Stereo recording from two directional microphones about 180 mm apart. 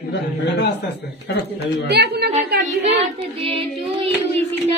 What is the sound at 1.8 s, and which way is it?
Speech, 65° right (ahead or behind).